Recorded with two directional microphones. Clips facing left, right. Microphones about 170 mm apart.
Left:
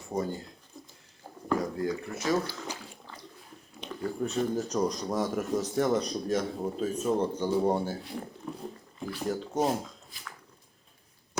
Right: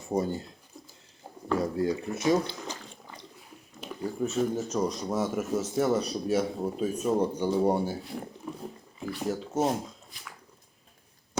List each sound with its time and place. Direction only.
0.1 s speech: 25° right (ahead or behind)
1.5 s speech: 25° right (ahead or behind)
3.8 s speech: 5° right (ahead or behind)